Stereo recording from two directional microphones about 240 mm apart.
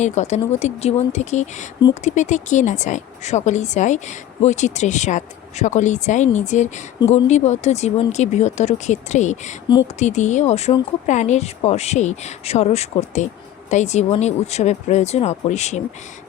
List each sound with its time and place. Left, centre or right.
0.0 s a woman's voice: left